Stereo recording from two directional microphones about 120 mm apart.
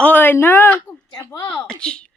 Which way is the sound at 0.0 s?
15° left (ahead or behind).